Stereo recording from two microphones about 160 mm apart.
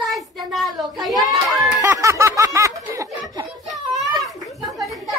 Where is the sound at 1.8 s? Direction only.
15° right (ahead or behind).